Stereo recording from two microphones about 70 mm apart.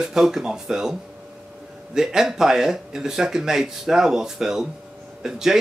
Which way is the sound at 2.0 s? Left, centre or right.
Centre.